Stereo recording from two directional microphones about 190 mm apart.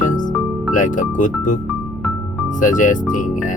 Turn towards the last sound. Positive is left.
turn(degrees=45)  # may be behind; listen again after turning